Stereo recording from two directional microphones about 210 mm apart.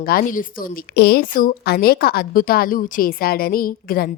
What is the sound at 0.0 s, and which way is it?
A woman's voice, 45° left (ahead or behind).